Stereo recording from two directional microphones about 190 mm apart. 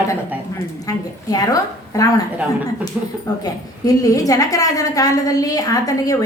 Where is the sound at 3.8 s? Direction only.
20° left (ahead or behind).